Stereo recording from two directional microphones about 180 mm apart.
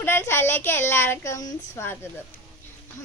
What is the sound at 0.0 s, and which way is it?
Speech, 15° left (ahead or behind).